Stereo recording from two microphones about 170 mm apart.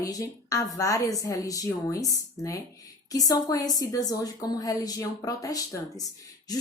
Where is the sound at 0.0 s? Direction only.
20° left (ahead or behind).